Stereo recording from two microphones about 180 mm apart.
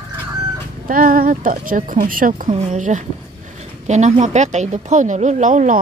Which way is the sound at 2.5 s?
40° right (ahead or behind).